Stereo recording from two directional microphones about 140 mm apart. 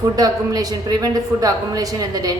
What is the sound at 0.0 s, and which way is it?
A woman's voice, 25° right (ahead or behind).